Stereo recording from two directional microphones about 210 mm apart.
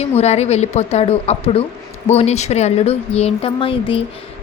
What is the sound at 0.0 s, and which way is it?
A woman's voice, 30° left (ahead or behind).